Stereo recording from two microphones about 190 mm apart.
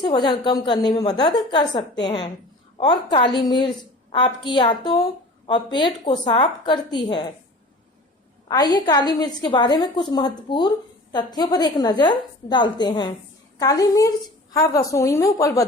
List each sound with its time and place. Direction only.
0.0 s a woman's voice: 25° left (ahead or behind)
8.4 s a woman's voice: 20° left (ahead or behind)